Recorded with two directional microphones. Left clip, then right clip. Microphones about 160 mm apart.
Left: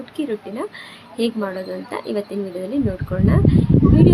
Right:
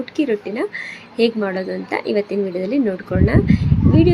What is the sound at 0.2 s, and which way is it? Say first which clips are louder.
A woman's voice: right 5 dB; 20° right (ahead or behind).